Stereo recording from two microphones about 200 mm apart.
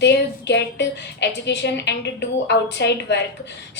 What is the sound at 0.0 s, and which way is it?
A woman's voice, 60° left (ahead or behind).